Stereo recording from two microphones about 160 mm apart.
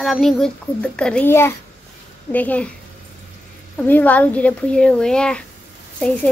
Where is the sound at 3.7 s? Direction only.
10° left (ahead or behind).